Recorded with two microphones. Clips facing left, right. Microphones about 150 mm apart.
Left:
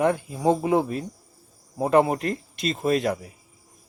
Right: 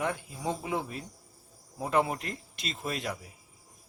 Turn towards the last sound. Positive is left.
turn(degrees=55)  # may be behind; listen again after turning